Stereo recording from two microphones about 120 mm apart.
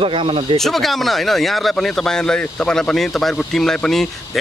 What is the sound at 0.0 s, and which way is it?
Speech, 45° right (ahead or behind).